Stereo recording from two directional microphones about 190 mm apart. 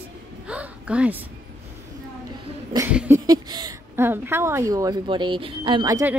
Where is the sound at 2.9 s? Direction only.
10° right (ahead or behind).